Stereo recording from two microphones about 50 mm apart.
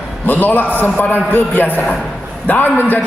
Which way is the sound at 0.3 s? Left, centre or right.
Left.